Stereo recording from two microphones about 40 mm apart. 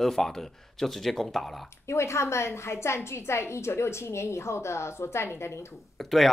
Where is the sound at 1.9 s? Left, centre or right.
Left.